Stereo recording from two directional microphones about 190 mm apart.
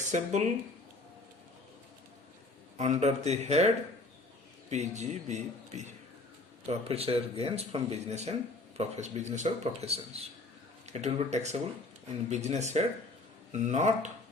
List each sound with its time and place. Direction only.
0.1 s speech: 40° right (ahead or behind)
2.7 s speech: 35° right (ahead or behind)
4.7 s speech: 40° right (ahead or behind)